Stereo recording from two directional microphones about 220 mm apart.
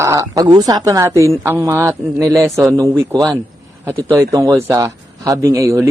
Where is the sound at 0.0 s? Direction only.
15° right (ahead or behind).